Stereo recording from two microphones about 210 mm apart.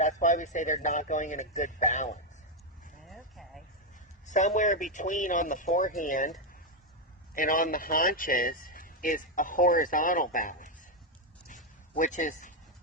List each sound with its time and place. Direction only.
0.0 s speech: 35° left (ahead or behind)
3.0 s a sound: centre (ahead or behind)
4.3 s speech: 35° left (ahead or behind)
7.3 s speech: 40° left (ahead or behind)
11.4 s dog: 40° left (ahead or behind)